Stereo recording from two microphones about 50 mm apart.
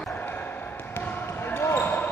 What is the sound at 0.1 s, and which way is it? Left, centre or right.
Basketball bounce, left.